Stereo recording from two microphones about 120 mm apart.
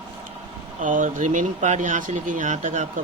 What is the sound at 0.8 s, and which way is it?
Speech, 90° right.